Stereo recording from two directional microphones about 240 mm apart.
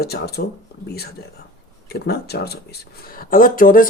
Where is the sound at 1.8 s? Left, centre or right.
Left.